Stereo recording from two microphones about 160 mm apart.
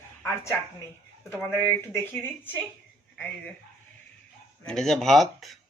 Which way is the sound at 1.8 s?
15° left (ahead or behind).